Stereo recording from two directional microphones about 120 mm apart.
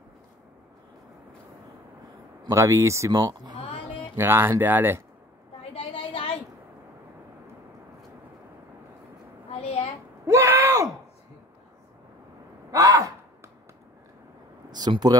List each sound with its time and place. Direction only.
2.5 s speech: 25° right (ahead or behind)
4.2 s speech: 20° right (ahead or behind)
5.8 s a sound: 50° left (ahead or behind)
9.5 s a sound: 55° left (ahead or behind)
10.2 s screaming: 25° right (ahead or behind)
12.7 s sigh: 30° right (ahead or behind)
14.7 s speech: 35° right (ahead or behind)